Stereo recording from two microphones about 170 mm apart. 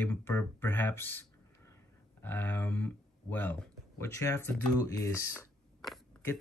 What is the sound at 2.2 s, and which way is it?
Speech, 10° left (ahead or behind).